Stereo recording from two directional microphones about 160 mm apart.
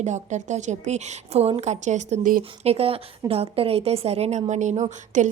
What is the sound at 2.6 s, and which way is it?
A woman's voice, 40° right (ahead or behind).